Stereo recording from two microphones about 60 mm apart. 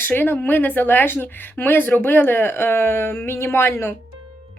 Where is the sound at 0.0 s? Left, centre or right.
Left.